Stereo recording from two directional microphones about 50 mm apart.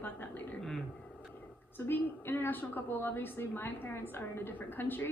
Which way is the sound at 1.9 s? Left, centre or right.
Left.